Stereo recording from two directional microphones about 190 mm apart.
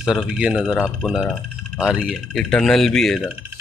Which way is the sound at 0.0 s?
Centre (ahead or behind).